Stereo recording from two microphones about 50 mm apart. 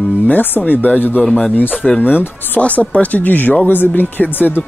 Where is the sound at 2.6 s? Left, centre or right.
Left.